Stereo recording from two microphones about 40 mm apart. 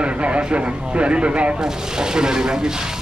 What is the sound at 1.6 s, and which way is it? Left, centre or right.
Speech, centre.